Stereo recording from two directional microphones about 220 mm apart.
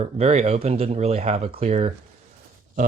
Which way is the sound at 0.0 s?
30° right (ahead or behind).